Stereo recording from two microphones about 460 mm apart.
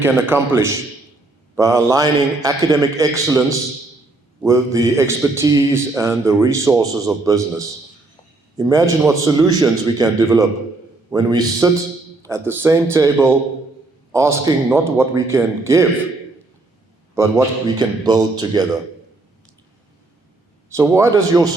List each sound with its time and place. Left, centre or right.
0.0 s a man's voice: centre
8.5 s a man's voice: centre
17.2 s speech: centre
20.7 s speech: centre